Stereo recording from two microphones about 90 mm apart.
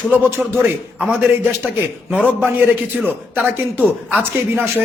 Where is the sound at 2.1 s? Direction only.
15° right (ahead or behind).